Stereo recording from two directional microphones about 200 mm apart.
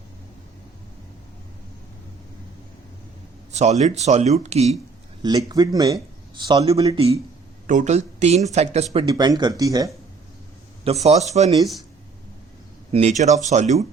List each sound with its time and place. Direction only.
3.5 s speech: 35° right (ahead or behind)
5.5 s speech: 20° right (ahead or behind)
7.7 s speech: 35° right (ahead or behind)
9.0 s speech: 20° right (ahead or behind)
10.8 s speech: 30° right (ahead or behind)
12.9 s speech: 35° right (ahead or behind)